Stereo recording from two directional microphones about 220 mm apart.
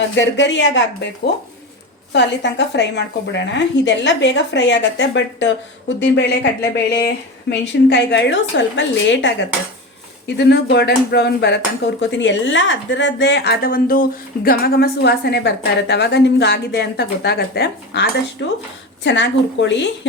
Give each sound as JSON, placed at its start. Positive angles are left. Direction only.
{"t": 0.2, "sound": "a woman's voice", "side_deg": 55}